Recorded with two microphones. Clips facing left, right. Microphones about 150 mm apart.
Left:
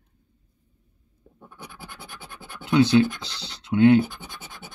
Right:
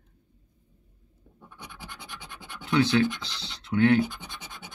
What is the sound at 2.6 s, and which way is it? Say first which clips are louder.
Speech: left 5 dB; 20° left (ahead or behind).